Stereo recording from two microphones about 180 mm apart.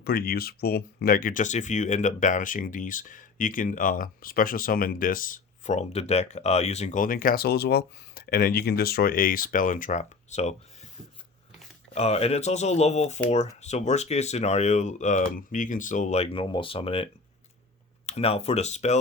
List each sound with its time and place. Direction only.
0.0 s speech: 55° left (ahead or behind); by 10.5 s 40° left (ahead or behind)
11.9 s speech: 35° left (ahead or behind)